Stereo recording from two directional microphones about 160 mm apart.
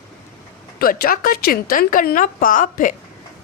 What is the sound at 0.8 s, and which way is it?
Speech, 65° left (ahead or behind).